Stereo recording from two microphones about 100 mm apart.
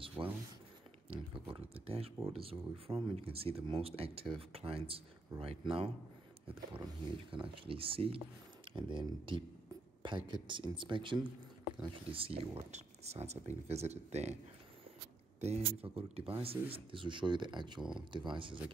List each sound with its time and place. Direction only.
0.2 s speech: 40° right (ahead or behind)
1.1 s speech: 60° right (ahead or behind)
7.2 s speech: 60° right (ahead or behind)
8.6 s speech: 55° right (ahead or behind); by 14.3 s 90° right
15.4 s speech: 90° right; by 16.5 s 70° right (ahead or behind)
16.7 s speech: 55° right (ahead or behind)